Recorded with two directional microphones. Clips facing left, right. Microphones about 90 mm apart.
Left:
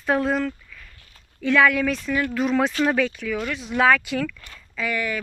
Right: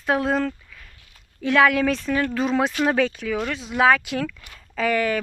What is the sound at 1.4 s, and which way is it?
Speech, 20° right (ahead or behind).